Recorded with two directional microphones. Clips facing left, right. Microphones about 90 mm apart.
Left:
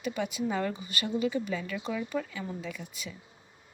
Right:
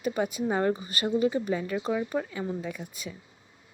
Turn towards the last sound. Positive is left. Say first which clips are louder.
# right 3 dB
turn(degrees=-45)  # may be behind; listen again after turning